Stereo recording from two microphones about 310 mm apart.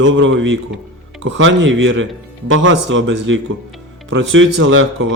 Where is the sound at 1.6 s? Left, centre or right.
Right.